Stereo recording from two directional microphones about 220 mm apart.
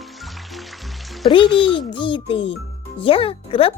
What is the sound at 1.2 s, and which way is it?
Speech, 20° left (ahead or behind).